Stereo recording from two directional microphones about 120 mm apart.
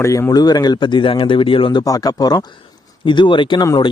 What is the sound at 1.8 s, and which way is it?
Speech, 30° left (ahead or behind).